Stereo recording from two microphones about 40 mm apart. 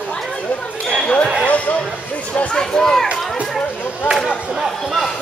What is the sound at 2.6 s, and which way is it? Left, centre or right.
Run, centre.